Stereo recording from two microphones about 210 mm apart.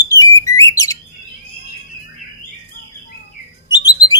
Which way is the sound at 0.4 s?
15° left (ahead or behind).